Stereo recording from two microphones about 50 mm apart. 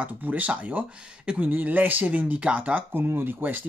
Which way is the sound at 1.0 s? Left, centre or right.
Right.